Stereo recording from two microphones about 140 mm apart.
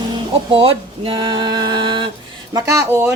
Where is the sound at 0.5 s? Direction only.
40° right (ahead or behind).